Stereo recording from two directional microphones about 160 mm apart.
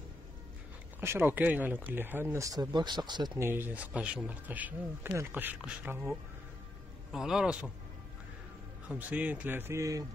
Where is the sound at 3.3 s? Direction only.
15° right (ahead or behind).